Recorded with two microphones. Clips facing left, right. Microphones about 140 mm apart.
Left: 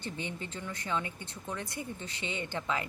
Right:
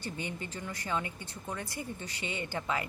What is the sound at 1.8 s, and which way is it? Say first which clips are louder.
Speech: even; 55° right (ahead or behind).